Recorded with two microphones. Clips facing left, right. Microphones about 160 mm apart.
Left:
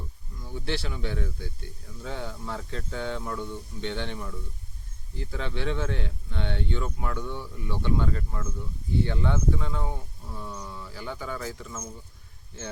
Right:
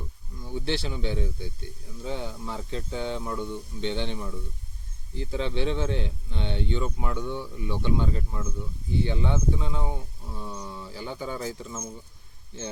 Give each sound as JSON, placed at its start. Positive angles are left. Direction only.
{"t": 0.5, "sound": "speech", "side_deg": -25}